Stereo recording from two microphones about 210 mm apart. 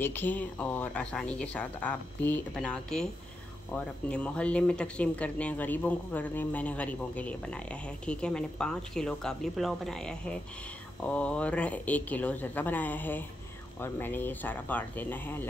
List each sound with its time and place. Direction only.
0.0 s speech: 10° left (ahead or behind)